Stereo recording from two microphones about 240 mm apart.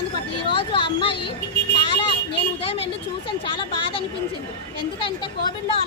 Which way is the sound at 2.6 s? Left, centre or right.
Left.